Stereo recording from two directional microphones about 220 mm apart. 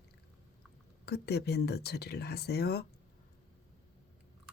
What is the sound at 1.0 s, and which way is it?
Speech, 50° left (ahead or behind).